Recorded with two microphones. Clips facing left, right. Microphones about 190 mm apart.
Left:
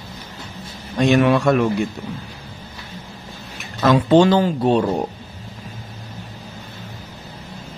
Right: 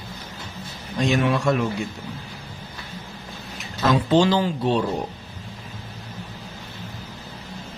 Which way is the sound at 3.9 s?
55° left (ahead or behind).